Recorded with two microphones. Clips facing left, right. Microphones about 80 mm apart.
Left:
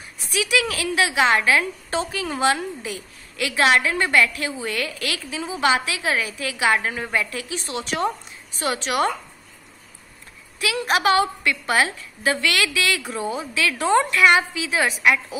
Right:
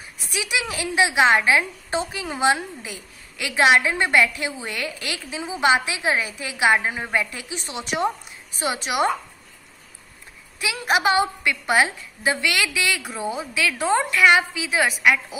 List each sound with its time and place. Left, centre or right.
0.3 s a woman's voice: right
10.6 s a woman's voice: centre